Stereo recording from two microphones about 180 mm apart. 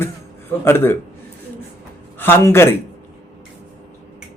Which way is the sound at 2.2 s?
15° left (ahead or behind).